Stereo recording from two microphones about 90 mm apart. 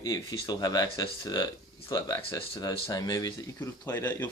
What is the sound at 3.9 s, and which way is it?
Speech, 35° left (ahead or behind).